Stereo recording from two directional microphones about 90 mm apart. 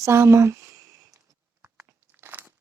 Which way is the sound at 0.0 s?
30° right (ahead or behind).